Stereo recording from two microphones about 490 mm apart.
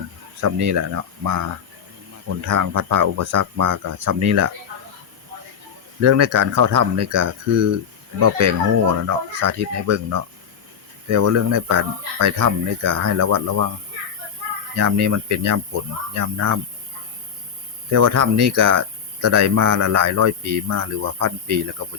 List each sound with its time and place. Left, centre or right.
0.4 s speech: right
6.0 s speech: right
14.8 s speech: right
17.9 s speech: right